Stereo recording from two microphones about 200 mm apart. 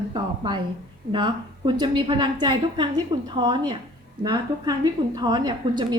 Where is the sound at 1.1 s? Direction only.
20° right (ahead or behind).